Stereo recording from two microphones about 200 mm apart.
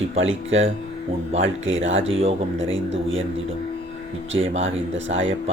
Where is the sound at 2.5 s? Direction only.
70° right (ahead or behind).